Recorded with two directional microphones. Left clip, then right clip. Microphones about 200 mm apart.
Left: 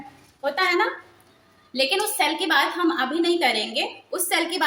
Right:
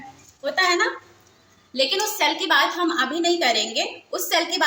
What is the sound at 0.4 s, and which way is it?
A woman's voice, 15° left (ahead or behind).